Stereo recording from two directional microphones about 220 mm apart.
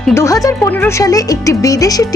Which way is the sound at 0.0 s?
10° left (ahead or behind).